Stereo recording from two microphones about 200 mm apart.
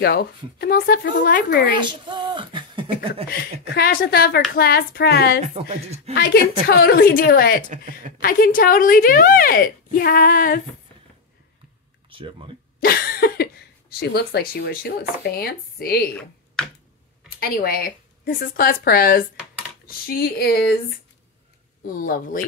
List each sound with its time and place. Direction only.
0.0 s a woman's voice: 55° left (ahead or behind)
1.8 s speech: 25° right (ahead or behind)
3.7 s a woman's voice: 50° left (ahead or behind)
5.5 s speech: 30° right (ahead or behind)
6.1 s a woman's voice: 50° left (ahead or behind)
12.1 s speech: 25° right (ahead or behind)
12.8 s a sound: 50° left (ahead or behind)
13.9 s a woman's voice: 55° left (ahead or behind)
17.4 s a woman's voice: 50° left (ahead or behind)
21.8 s a woman's voice: 45° left (ahead or behind)